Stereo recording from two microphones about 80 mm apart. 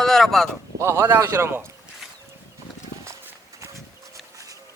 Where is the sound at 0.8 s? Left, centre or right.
Right.